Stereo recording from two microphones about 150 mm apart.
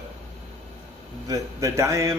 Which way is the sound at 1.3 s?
20° right (ahead or behind).